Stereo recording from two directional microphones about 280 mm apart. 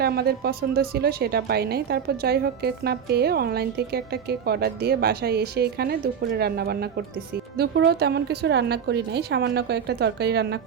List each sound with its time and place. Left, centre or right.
0.0 s a woman's voice: right